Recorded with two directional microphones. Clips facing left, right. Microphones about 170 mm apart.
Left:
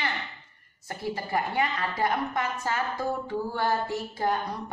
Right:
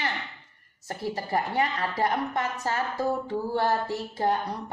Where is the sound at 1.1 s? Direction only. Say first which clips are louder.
Right 1 dB; 35° right (ahead or behind).